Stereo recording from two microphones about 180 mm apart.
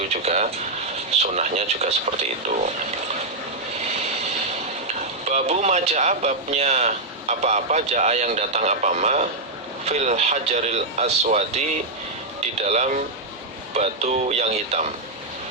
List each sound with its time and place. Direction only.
0.2 s speech: 35° right (ahead or behind)
5.3 s speech: 40° right (ahead or behind)
12.6 s speech: 40° right (ahead or behind)